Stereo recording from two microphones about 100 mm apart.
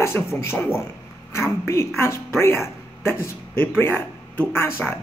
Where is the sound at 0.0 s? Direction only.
30° left (ahead or behind).